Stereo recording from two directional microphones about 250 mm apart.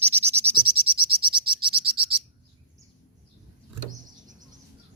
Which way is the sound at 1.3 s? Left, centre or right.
Centre.